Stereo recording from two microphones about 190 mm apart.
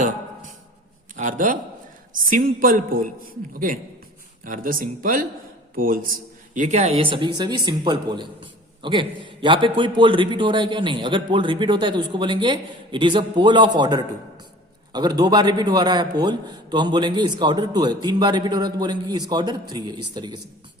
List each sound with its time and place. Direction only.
1.1 s a man's voice: 45° right (ahead or behind)
4.4 s a woman's voice: 45° right (ahead or behind); by 20.4 s 20° right (ahead or behind)